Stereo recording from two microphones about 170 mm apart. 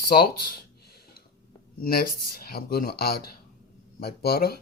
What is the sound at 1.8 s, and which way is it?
Speech, 60° left (ahead or behind).